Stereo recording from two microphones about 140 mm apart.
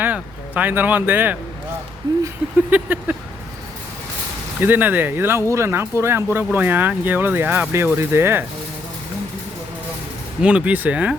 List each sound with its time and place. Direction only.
0.0 s speech: 10° right (ahead or behind)
2.2 s a sound: 15° right (ahead or behind)
4.6 s speech: 15° right (ahead or behind)
10.4 s speech: 10° right (ahead or behind)